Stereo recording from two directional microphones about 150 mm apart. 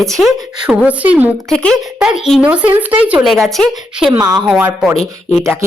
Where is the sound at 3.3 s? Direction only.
Centre (ahead or behind).